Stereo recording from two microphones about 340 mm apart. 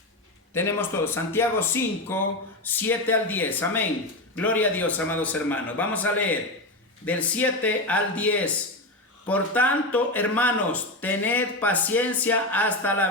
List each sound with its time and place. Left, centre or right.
0.5 s speech: centre